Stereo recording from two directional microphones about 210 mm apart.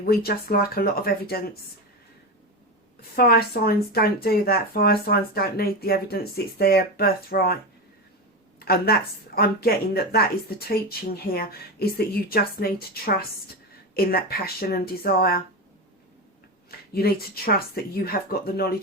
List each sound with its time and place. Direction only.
0.1 s speech: 45° left (ahead or behind)
3.2 s speech: 45° left (ahead or behind)
16.9 s speech: 45° left (ahead or behind)